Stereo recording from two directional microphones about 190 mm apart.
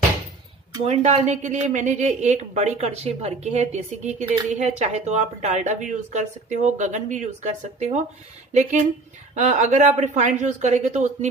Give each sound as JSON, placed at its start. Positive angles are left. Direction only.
{"t": 0.8, "sound": "speech", "side_deg": -35}
{"t": 9.3, "sound": "speech", "side_deg": -40}